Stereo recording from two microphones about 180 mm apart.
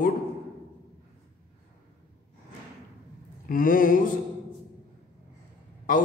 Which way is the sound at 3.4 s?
50° left (ahead or behind).